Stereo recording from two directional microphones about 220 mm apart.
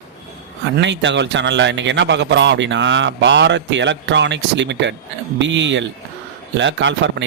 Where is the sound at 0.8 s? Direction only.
55° right (ahead or behind).